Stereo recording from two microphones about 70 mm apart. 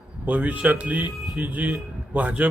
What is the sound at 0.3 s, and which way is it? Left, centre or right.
A man's voice, right.